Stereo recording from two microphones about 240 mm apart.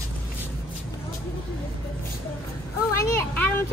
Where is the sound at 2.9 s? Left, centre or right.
Centre.